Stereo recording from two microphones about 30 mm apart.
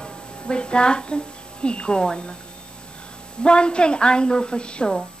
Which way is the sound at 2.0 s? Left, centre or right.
Left.